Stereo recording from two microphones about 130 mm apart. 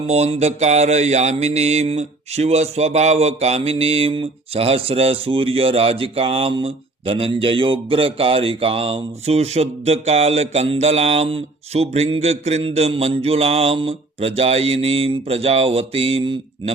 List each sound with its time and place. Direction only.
0.1 s mantra: 55° right (ahead or behind)